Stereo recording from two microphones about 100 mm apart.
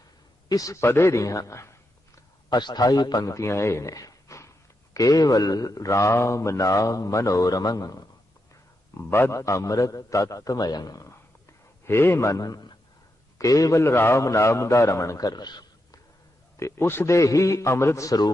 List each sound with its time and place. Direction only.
0.4 s speech: 35° left (ahead or behind)
2.1 s speech: 45° left (ahead or behind)
9.0 s a man's voice: 25° left (ahead or behind); by 16.0 s 45° left (ahead or behind)
16.6 s speech: 25° left (ahead or behind)